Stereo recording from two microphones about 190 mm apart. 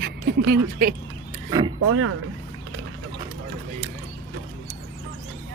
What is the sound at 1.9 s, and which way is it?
Speech, 90° right.